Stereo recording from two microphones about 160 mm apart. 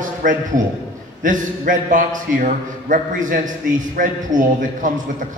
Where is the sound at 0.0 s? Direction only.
55° right (ahead or behind).